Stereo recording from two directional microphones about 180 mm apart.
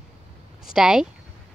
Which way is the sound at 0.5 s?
5° right (ahead or behind).